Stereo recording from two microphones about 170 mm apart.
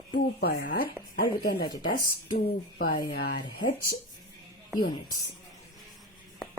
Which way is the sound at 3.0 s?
70° left (ahead or behind).